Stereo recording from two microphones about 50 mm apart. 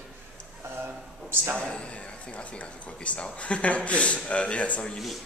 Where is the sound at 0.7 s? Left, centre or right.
Right.